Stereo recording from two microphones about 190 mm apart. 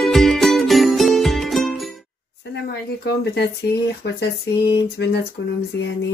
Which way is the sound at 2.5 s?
60° left (ahead or behind).